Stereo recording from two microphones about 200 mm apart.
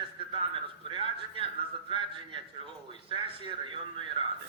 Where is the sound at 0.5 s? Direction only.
25° right (ahead or behind).